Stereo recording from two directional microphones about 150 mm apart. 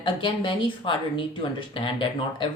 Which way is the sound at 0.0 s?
35° left (ahead or behind).